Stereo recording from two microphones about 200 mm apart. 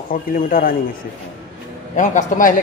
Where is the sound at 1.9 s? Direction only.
40° left (ahead or behind).